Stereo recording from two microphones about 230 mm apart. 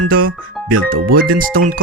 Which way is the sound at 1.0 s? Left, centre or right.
Right.